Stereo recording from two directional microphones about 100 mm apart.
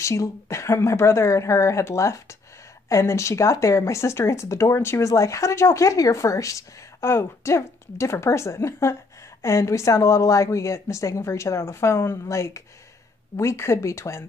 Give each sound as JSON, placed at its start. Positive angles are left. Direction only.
{"t": 0.0, "sound": "a woman's voice", "side_deg": 30}